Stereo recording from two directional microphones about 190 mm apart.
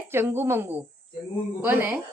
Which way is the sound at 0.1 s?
10° right (ahead or behind).